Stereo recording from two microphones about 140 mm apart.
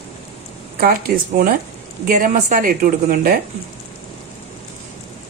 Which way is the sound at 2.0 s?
65° right (ahead or behind).